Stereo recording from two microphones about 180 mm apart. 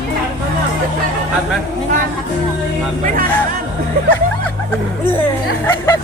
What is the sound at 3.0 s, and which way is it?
Music, 50° right (ahead or behind).